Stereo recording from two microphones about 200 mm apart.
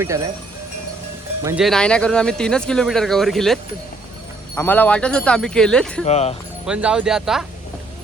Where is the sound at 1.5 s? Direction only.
Centre (ahead or behind).